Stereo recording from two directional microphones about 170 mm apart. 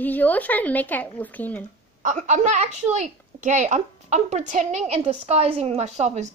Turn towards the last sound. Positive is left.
turn(degrees=-45)  # may be behind; listen again after turning